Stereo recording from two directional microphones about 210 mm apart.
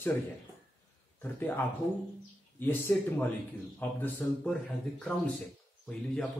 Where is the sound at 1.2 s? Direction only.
10° left (ahead or behind).